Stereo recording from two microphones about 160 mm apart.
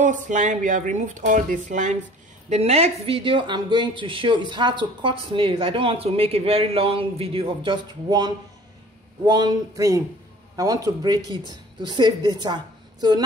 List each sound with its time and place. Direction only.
0.0 s a woman's voice: 55° right (ahead or behind); by 12.5 s 25° right (ahead or behind)